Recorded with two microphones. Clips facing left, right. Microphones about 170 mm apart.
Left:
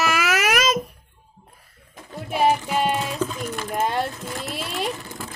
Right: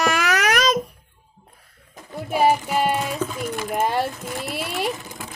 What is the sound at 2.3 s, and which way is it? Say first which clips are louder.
Music: right 1 dB; 10° right (ahead or behind).